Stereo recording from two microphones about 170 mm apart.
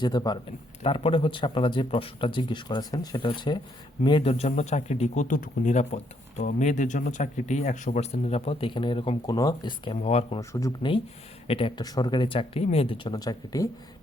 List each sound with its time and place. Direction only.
0.0 s speech: 25° left (ahead or behind)
10.5 s speech: 20° left (ahead or behind)